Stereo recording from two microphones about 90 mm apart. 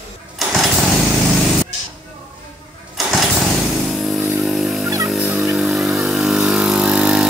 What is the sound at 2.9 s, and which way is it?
Engine starting, centre (ahead or behind).